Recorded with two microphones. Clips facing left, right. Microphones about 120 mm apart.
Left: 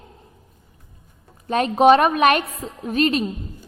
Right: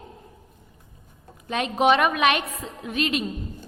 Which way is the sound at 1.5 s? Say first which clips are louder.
Left 6 dB; 40° left (ahead or behind).